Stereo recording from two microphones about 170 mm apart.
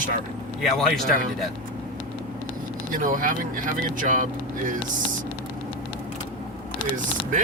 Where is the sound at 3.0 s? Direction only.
50° right (ahead or behind).